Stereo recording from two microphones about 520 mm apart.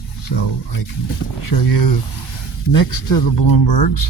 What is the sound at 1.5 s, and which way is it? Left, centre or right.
Speech, left.